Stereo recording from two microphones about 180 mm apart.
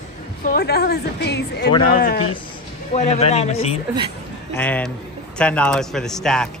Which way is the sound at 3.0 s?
35° left (ahead or behind).